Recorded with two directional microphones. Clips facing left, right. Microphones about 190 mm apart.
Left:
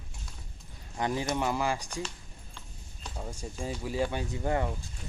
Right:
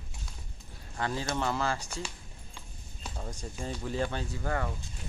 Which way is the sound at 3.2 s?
10° left (ahead or behind).